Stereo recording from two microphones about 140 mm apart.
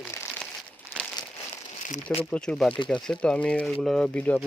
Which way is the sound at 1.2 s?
30° left (ahead or behind).